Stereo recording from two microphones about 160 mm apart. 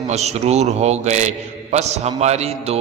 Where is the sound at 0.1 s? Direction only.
45° right (ahead or behind).